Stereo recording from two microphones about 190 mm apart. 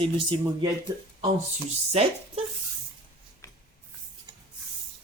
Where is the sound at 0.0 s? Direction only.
25° right (ahead or behind).